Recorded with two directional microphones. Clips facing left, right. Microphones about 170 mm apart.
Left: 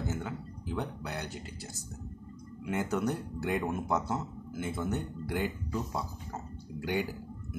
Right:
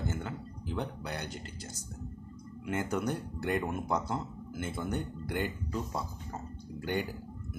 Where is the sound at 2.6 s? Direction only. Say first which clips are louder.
Left 1 dB; centre (ahead or behind).